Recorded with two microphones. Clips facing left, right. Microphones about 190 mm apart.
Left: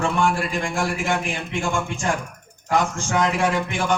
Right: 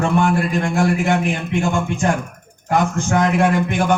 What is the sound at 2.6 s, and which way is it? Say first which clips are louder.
A man's voice: right 4 dB; 50° right (ahead or behind).